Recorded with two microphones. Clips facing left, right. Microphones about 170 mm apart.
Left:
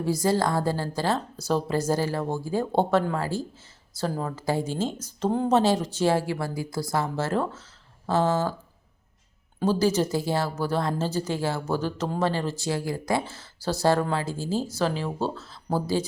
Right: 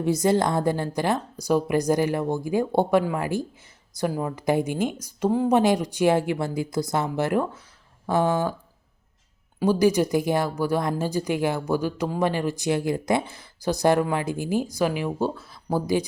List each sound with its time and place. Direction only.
0.0 s speech: 20° right (ahead or behind)
9.6 s speech: 15° right (ahead or behind)